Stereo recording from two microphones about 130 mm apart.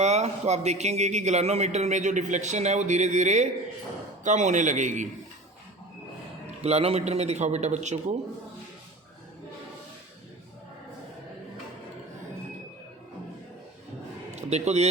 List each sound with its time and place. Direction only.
0.0 s a man's voice: 60° right (ahead or behind)
6.6 s a man's voice: 55° right (ahead or behind)
14.3 s speech: 60° right (ahead or behind)